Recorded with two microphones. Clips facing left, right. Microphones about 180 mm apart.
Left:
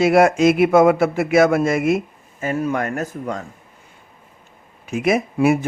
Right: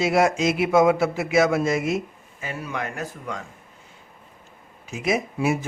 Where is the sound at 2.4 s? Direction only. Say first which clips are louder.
Left 9 dB; 45° left (ahead or behind).